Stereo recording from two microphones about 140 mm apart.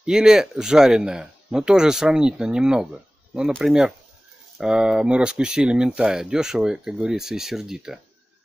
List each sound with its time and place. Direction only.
0.0 s speech: 5° right (ahead or behind)